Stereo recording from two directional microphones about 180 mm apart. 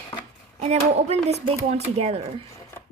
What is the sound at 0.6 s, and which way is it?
Speech, 35° right (ahead or behind).